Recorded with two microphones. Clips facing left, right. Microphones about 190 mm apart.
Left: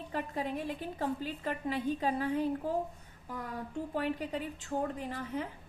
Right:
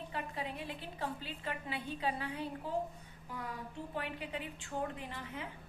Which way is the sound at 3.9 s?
45° left (ahead or behind).